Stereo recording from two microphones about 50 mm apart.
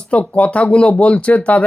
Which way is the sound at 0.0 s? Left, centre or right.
Left.